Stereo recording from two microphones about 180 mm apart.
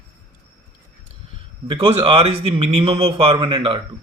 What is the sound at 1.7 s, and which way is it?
Speech, 25° right (ahead or behind).